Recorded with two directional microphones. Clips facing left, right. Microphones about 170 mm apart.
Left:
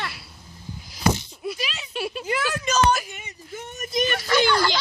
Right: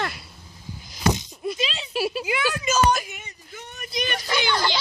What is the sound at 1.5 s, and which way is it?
Speech, 25° right (ahead or behind).